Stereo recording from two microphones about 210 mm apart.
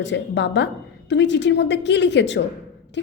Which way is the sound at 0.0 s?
55° left (ahead or behind).